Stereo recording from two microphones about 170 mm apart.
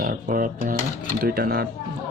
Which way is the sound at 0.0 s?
55° right (ahead or behind).